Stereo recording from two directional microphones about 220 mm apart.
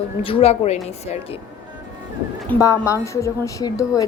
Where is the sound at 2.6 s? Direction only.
15° left (ahead or behind).